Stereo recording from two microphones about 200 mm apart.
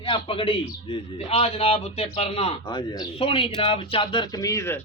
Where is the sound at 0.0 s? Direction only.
25° left (ahead or behind).